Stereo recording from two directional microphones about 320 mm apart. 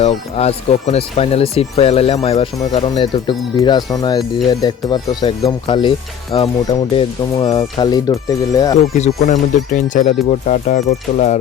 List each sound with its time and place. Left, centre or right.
0.0 s speech: centre
9.2 s speech: left